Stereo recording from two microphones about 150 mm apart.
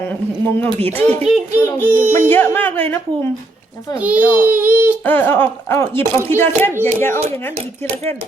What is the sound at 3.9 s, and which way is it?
Speech, 10° right (ahead or behind).